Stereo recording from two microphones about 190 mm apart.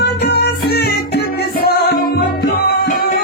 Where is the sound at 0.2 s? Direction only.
60° left (ahead or behind).